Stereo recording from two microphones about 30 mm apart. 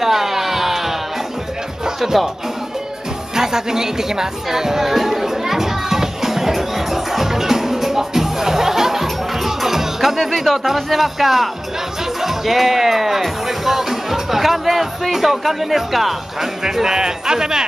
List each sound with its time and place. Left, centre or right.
0.0 s music: centre
2.0 s speech: centre
3.3 s music: centre
10.7 s speech: centre
16.7 s speech: centre